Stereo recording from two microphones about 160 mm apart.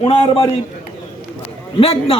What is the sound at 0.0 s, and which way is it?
Speech, 35° left (ahead or behind).